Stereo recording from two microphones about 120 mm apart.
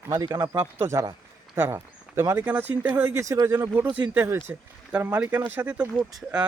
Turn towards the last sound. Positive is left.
turn(degrees=-30)  # may be behind; listen again after turning